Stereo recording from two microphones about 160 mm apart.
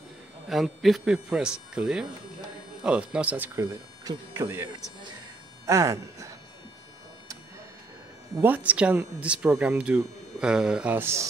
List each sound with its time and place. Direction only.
0.5 s speech: centre (ahead or behind); by 6.3 s 20° right (ahead or behind)
8.4 s speech: 10° right (ahead or behind)